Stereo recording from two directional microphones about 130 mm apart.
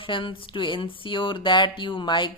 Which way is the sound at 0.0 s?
40° left (ahead or behind).